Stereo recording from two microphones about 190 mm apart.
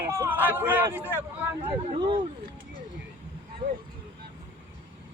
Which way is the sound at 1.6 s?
35° right (ahead or behind).